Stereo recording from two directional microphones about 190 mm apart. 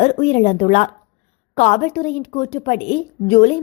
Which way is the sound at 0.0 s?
35° left (ahead or behind).